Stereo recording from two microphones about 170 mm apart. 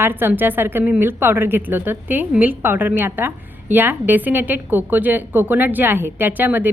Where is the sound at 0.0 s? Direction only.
10° right (ahead or behind).